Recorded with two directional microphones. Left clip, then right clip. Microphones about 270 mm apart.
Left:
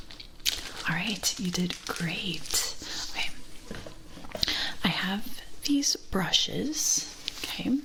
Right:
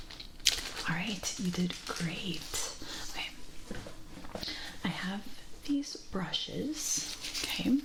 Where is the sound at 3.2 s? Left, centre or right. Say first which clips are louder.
Left 6 dB; centre.